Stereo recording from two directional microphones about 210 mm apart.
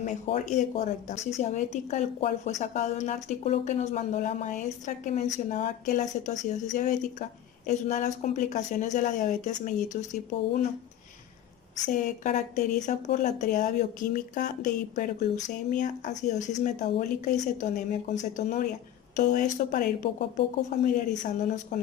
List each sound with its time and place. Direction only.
0.0 s a woman's voice: 35° left (ahead or behind)
11.9 s a woman's voice: 35° left (ahead or behind)